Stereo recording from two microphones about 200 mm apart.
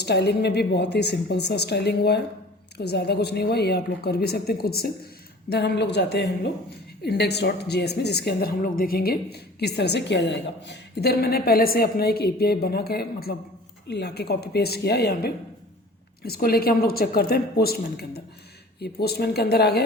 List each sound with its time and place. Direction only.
0.0 s a woman's voice: 55° left (ahead or behind)